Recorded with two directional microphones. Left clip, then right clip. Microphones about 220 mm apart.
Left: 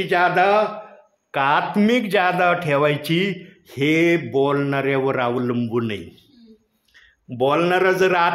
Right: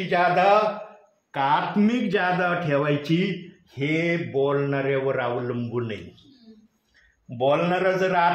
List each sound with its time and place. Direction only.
0.1 s speech: 45° left (ahead or behind)
7.3 s speech: 45° left (ahead or behind)